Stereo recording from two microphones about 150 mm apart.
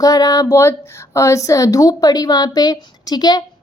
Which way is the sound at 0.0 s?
25° left (ahead or behind).